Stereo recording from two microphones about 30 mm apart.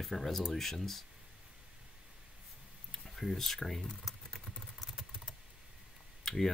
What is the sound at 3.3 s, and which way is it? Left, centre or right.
Speech, centre.